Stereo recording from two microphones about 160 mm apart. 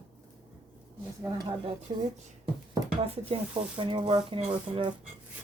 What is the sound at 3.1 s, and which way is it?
Speech, 35° right (ahead or behind).